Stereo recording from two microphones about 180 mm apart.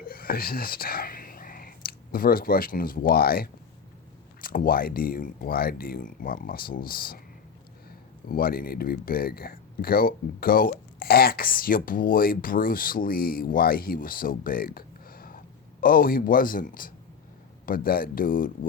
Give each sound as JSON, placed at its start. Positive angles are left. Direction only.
{"t": 0.0, "sound": "speech", "side_deg": 55}